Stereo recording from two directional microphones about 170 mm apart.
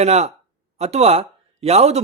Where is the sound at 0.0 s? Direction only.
40° right (ahead or behind).